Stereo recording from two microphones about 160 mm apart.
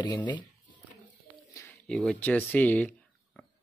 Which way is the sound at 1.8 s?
5° left (ahead or behind).